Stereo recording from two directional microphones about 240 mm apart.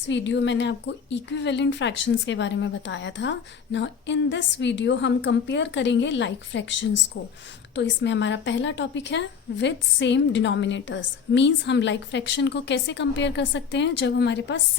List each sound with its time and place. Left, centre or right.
0.1 s a woman's voice: left